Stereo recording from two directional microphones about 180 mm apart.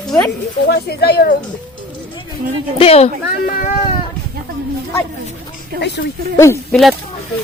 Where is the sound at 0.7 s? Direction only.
60° left (ahead or behind).